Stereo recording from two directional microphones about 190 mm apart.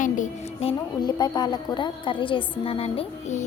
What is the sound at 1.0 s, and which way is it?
A woman's voice, 20° left (ahead or behind).